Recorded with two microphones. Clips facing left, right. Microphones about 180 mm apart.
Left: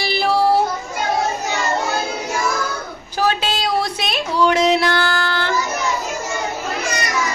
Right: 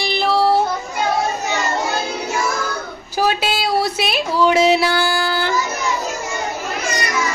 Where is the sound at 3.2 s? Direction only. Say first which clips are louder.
Right 1 dB; 10° right (ahead or behind).